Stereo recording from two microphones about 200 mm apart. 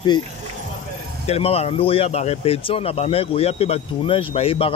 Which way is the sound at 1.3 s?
30° left (ahead or behind).